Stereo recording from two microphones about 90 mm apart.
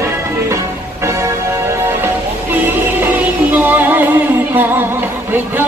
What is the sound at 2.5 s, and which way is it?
Music, 20° right (ahead or behind).